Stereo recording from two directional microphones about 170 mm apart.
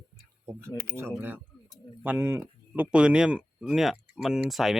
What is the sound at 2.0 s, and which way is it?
Speech, 15° right (ahead or behind).